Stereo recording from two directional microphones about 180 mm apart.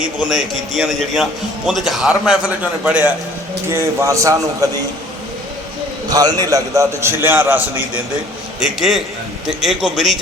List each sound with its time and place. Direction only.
0.0 s a man's voice: 5° right (ahead or behind)
6.1 s a man's voice: 20° right (ahead or behind)
8.6 s a man's voice: centre (ahead or behind)